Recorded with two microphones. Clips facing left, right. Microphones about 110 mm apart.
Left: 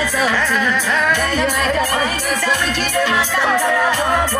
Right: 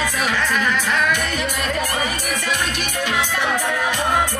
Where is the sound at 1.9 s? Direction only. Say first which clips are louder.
Left 4 dB; 65° left (ahead or behind).